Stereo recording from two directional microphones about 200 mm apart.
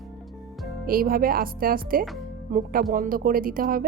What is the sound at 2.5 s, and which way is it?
A woman's voice, 45° right (ahead or behind).